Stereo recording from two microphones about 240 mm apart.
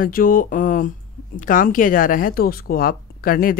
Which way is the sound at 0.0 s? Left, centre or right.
Left.